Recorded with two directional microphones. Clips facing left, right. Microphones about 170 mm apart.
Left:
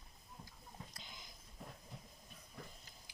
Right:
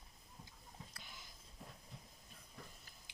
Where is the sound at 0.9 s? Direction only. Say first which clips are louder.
Left 1 dB; 20° left (ahead or behind).